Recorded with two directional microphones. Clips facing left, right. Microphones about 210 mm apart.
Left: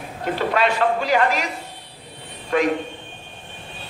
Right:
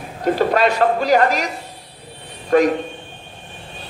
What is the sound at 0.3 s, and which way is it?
A man's voice, 40° right (ahead or behind).